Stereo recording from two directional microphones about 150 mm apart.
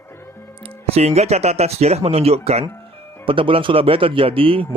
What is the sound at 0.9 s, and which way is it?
Speech, 45° right (ahead or behind).